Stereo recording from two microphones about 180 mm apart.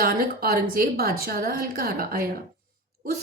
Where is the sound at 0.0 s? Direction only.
55° right (ahead or behind).